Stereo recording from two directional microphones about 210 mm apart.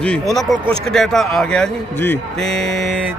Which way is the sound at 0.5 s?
25° right (ahead or behind).